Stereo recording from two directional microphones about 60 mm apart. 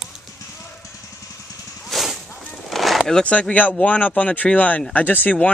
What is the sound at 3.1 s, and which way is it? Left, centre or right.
Speech, left.